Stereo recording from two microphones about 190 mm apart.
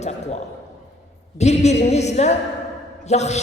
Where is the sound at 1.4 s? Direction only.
35° left (ahead or behind).